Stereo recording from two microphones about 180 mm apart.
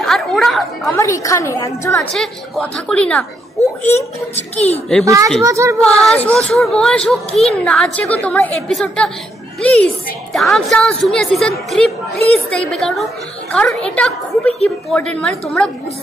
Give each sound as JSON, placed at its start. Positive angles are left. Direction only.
{"t": 0.0, "sound": "a woman's voice", "side_deg": 0}
{"t": 0.9, "sound": "a woman's voice", "side_deg": 15}
{"t": 2.0, "sound": "a woman's voice", "side_deg": 0}
{"t": 3.9, "sound": "a child's voice", "side_deg": 35}
{"t": 5.0, "sound": "a child's voice", "side_deg": -20}
{"t": 6.1, "sound": "a woman's voice", "side_deg": 5}